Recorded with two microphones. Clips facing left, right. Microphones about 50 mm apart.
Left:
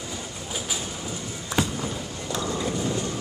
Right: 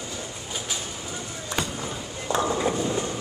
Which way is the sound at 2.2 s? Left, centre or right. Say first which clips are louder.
Right 5 dB; right.